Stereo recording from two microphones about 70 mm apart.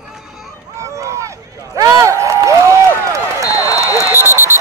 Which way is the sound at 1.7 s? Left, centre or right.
Right.